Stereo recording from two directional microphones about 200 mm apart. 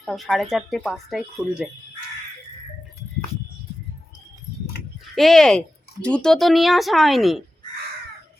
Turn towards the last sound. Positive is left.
turn(degrees=0)  # may be behind; listen again after turning